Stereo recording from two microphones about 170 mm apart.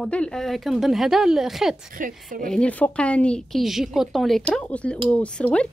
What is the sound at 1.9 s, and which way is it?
Speech, 55° right (ahead or behind).